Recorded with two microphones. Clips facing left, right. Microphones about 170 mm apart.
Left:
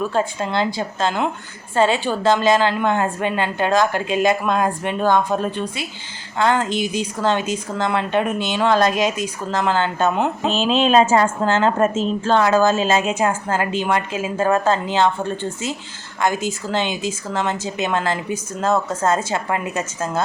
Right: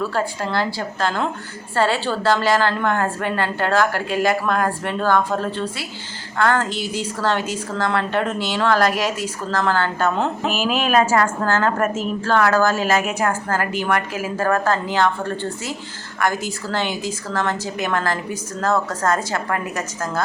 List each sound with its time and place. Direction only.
0.0 s a woman's voice: 20° left (ahead or behind)